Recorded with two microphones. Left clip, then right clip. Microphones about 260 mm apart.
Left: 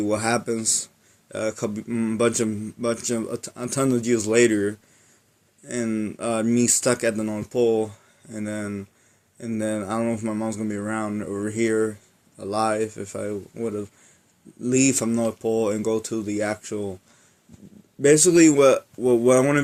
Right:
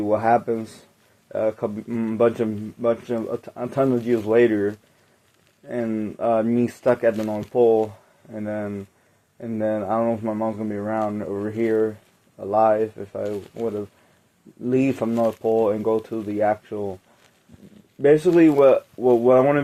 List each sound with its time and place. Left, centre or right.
0.0 s speech: left
18.0 s speech: left